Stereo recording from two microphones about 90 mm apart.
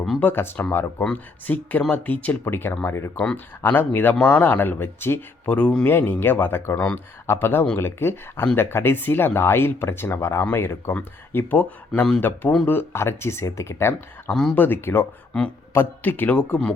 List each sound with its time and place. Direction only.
0.2 s a man's voice: 20° left (ahead or behind)
3.2 s a man's voice: 15° left (ahead or behind)
15.3 s a man's voice: 15° left (ahead or behind)